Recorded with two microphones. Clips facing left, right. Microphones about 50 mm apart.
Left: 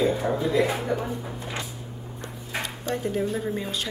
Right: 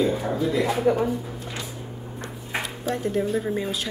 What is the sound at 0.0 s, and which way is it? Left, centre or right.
Speech, centre.